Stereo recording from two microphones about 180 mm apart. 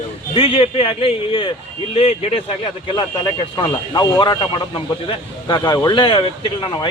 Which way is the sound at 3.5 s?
25° left (ahead or behind).